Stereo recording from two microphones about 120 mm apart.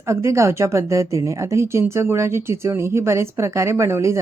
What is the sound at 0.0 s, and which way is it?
Speech, 25° right (ahead or behind).